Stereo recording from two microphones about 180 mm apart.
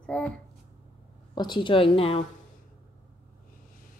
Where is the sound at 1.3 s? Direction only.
25° left (ahead or behind).